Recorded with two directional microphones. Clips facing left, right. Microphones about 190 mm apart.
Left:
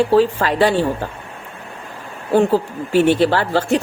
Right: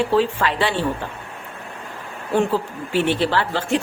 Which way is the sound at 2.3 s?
40° left (ahead or behind).